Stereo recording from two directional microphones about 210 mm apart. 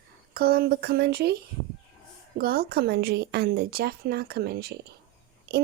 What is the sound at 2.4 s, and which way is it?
Speech, 45° right (ahead or behind).